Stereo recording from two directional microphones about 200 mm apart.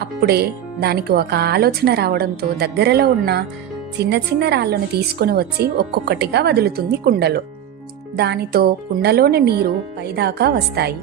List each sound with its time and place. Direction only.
0.0 s speech: 55° right (ahead or behind)